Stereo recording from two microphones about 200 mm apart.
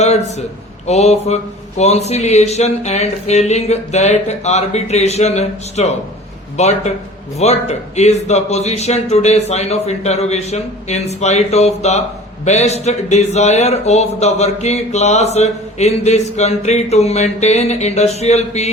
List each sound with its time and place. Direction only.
0.0 s a man's voice: 35° left (ahead or behind)